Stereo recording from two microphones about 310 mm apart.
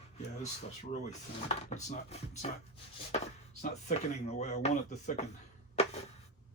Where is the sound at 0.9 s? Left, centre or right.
Left.